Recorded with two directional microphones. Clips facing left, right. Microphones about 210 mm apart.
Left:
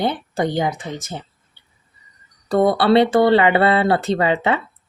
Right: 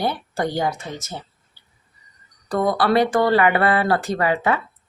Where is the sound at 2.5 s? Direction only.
25° left (ahead or behind).